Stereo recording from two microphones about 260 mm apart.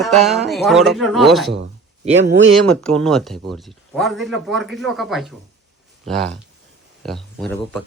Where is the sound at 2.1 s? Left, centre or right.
Right.